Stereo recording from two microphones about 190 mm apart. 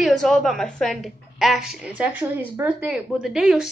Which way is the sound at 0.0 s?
Centre (ahead or behind).